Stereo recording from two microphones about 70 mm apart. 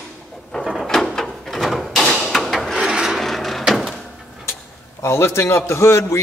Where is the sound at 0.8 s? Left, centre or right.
Centre.